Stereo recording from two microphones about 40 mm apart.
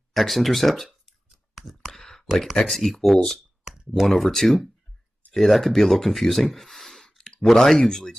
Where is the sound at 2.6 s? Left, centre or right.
Centre.